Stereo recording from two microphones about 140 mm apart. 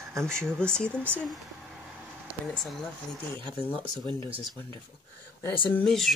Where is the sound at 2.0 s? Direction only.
Centre (ahead or behind).